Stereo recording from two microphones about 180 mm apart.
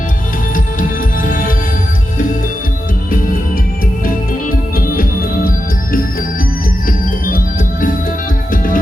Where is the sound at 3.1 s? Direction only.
50° left (ahead or behind).